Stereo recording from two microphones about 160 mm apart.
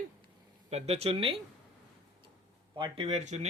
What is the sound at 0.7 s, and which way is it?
Speech, 40° right (ahead or behind).